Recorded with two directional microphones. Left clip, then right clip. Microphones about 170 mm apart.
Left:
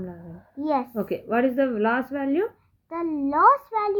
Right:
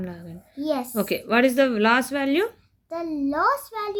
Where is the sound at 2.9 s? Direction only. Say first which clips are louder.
Even; 30° left (ahead or behind).